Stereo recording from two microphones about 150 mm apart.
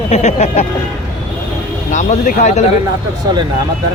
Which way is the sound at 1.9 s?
55° left (ahead or behind).